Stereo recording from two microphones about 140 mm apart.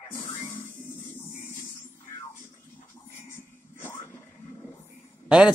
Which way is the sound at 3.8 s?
15° left (ahead or behind).